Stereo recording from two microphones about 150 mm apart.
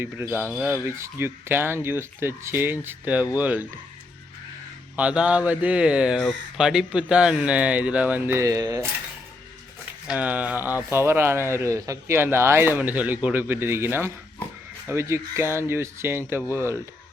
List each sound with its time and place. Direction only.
0.0 s speech: 15° right (ahead or behind)
4.9 s speech: 10° right (ahead or behind)
10.1 s speech: 10° right (ahead or behind)